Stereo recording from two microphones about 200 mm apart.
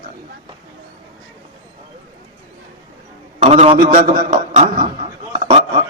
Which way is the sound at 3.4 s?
30° right (ahead or behind).